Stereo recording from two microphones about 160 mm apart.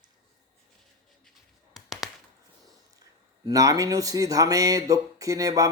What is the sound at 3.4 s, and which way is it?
Speech, 20° right (ahead or behind).